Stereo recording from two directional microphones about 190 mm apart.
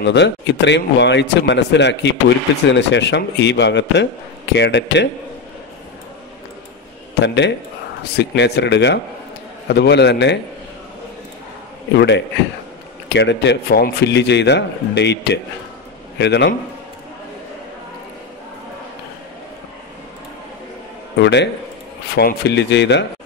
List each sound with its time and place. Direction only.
0.0 s a man's voice: 65° left (ahead or behind)
7.2 s a man's voice: 65° left (ahead or behind)
13.1 s a man's voice: 65° left (ahead or behind)
21.2 s a man's voice: 65° left (ahead or behind)